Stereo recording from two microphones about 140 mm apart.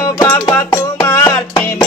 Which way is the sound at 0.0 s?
20° left (ahead or behind).